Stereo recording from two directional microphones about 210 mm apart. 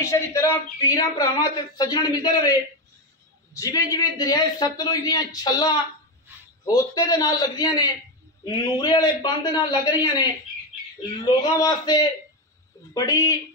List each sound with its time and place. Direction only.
0.0 s a man's voice: 15° left (ahead or behind)